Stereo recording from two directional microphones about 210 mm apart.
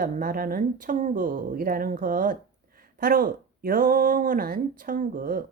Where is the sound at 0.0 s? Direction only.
40° right (ahead or behind).